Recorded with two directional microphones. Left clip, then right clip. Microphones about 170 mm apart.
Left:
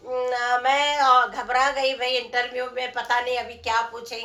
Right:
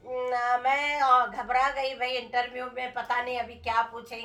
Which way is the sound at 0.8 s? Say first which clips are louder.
Left 4 dB; 15° right (ahead or behind).